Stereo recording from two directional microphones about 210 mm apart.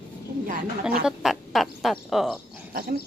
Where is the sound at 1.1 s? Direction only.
Centre (ahead or behind).